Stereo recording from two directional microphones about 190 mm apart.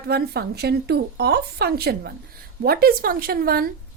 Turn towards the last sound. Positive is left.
turn(degrees=-50)  # may be behind; listen again after turning